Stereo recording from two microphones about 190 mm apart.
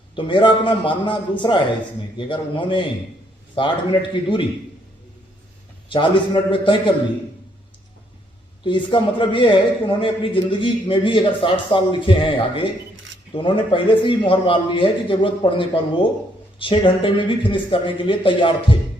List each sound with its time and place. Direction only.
0.2 s a man's voice: 25° left (ahead or behind)
5.9 s a man's voice: 25° left (ahead or behind)
8.6 s a man's voice: 25° left (ahead or behind)